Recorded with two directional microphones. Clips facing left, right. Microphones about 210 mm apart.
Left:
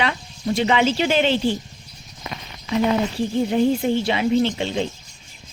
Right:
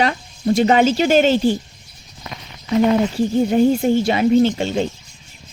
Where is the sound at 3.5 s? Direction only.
45° right (ahead or behind).